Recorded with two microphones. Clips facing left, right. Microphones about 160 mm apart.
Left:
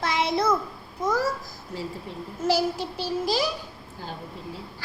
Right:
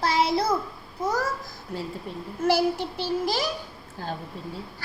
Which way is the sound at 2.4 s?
55° right (ahead or behind).